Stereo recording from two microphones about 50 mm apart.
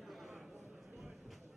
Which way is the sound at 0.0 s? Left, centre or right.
Centre.